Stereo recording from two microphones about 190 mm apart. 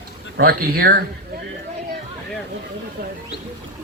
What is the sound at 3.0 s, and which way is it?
Speech, 55° right (ahead or behind).